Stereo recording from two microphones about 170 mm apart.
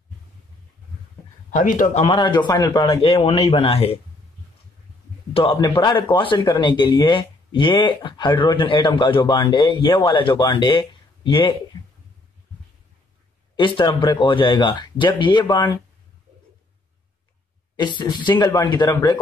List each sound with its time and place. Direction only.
1.5 s speech: 50° left (ahead or behind)
2.0 s speech: 25° left (ahead or behind)
5.3 s speech: 30° left (ahead or behind)
13.6 s speech: 30° left (ahead or behind)
17.7 s speech: 25° left (ahead or behind)